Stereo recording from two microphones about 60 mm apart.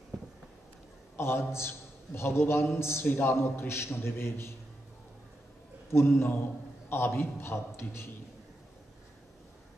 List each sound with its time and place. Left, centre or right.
1.1 s a man's voice: left
5.9 s a man's voice: left